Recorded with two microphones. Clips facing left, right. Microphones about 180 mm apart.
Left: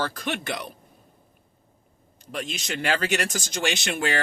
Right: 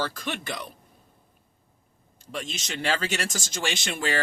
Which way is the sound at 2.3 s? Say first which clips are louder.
Left 3 dB; 50° left (ahead or behind).